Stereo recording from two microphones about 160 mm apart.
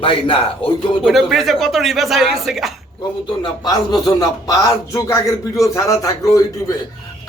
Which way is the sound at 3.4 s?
25° left (ahead or behind).